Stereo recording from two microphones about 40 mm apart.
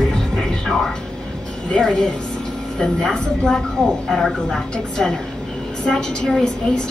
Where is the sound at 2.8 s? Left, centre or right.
Centre.